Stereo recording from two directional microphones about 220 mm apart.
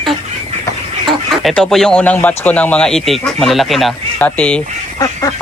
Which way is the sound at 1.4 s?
5° left (ahead or behind).